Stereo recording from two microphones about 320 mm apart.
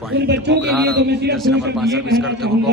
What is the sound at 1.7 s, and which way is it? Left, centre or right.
Speech, centre.